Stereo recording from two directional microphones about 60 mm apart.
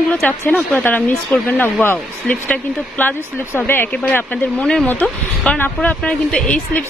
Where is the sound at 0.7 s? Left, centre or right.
Left.